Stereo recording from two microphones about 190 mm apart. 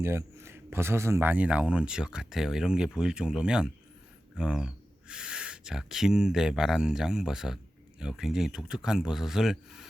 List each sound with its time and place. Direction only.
0.0 s speech: 15° right (ahead or behind)